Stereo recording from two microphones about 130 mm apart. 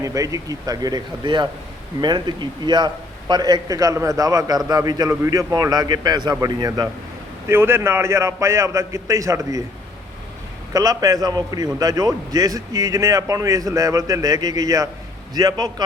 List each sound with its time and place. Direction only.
0.0 s a man's voice: 25° right (ahead or behind)
7.4 s a man's voice: 20° right (ahead or behind)
10.8 s a man's voice: 30° right (ahead or behind)